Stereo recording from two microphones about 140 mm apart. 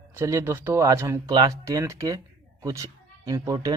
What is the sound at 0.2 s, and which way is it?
Speech, 20° right (ahead or behind).